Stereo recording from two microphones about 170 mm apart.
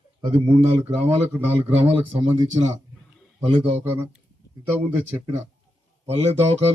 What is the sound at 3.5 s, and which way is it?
Speech, 35° right (ahead or behind).